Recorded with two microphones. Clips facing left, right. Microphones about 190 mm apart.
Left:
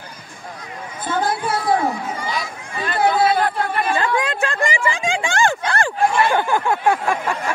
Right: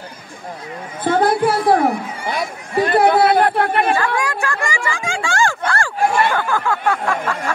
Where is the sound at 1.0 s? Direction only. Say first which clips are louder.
Right 7 dB; 65° right (ahead or behind).